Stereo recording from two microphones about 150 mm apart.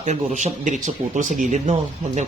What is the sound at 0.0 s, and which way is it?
Speech, 50° right (ahead or behind).